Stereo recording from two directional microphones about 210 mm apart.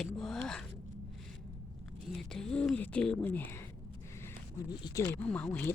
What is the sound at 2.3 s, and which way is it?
Speech, centre (ahead or behind).